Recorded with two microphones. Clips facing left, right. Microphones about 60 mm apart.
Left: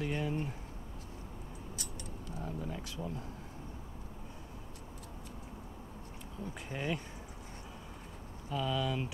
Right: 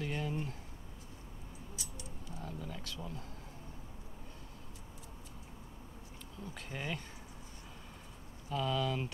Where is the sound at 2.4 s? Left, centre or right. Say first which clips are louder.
Left 4 dB; centre.